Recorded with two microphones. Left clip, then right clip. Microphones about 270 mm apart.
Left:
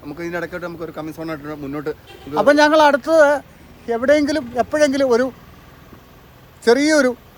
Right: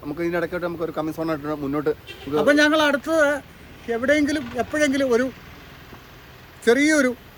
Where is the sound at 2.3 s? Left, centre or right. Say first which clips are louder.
Left 5 dB; centre.